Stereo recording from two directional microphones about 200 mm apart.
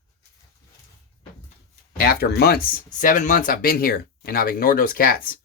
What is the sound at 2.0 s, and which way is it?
Speech, 50° left (ahead or behind).